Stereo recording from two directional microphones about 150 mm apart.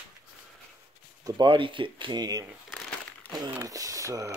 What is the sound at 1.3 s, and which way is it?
Speech, 30° right (ahead or behind).